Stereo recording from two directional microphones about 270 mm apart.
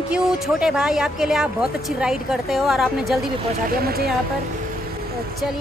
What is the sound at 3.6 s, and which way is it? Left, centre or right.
Speech, right.